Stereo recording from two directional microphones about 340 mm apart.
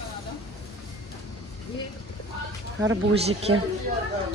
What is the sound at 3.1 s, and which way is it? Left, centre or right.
Speech, centre.